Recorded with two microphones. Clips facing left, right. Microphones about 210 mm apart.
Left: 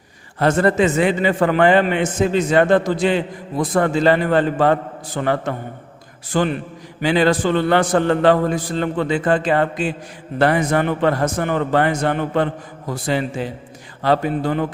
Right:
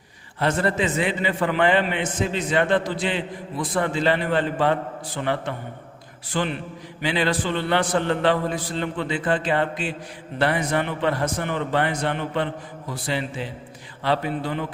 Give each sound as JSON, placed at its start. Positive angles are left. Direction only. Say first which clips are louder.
{"t": 0.3, "sound": "a man's voice", "louder": "left 7 dB", "side_deg": 45}